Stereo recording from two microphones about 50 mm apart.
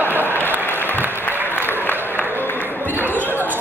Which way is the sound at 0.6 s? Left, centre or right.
Left.